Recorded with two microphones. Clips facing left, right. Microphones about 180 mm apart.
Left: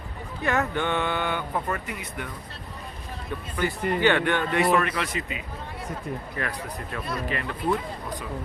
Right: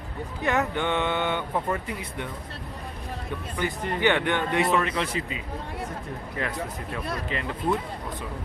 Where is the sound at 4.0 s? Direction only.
15° right (ahead or behind).